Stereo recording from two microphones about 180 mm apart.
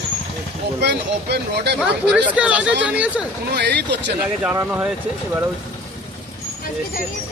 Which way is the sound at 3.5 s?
70° right (ahead or behind).